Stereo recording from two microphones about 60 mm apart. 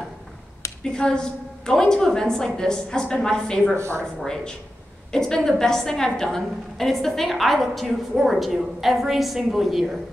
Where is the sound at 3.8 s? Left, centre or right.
Right.